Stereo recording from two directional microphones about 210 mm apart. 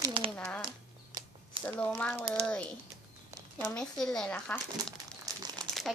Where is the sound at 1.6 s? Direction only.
25° right (ahead or behind).